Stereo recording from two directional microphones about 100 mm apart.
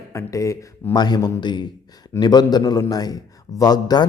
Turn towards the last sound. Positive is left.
turn(degrees=40)  # may be behind; listen again after turning